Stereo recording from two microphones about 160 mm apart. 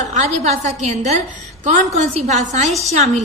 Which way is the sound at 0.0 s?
45° right (ahead or behind).